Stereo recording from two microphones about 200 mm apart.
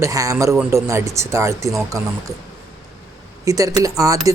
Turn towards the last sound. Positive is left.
turn(degrees=-15)  # may be behind; listen again after turning